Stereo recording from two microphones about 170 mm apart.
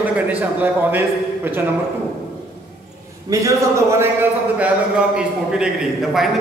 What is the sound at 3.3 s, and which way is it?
A man's voice, 20° right (ahead or behind).